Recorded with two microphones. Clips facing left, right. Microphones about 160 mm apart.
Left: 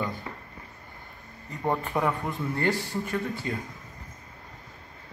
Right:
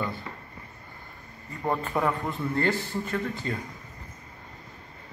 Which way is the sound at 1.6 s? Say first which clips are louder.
Even; 15° left (ahead or behind).